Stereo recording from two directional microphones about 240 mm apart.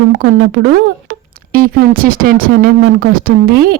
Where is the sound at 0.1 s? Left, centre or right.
Right.